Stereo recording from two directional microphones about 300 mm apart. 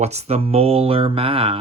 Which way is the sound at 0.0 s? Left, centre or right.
Right.